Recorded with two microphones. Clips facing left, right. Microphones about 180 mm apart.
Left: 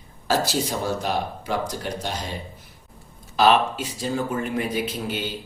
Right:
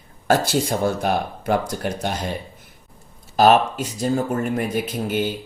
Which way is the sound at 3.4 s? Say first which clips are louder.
Right 3 dB; 45° right (ahead or behind).